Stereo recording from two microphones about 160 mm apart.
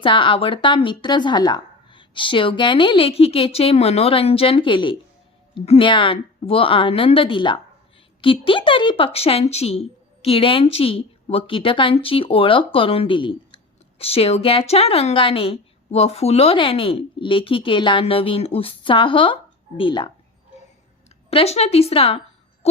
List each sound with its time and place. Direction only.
0.0 s a woman's voice: 30° left (ahead or behind)
21.2 s a woman's voice: 40° left (ahead or behind)
22.6 s music: 40° left (ahead or behind)